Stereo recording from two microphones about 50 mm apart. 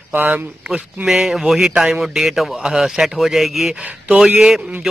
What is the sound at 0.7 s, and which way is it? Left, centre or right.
Speech, centre.